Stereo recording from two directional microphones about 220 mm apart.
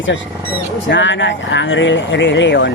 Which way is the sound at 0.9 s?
55° left (ahead or behind).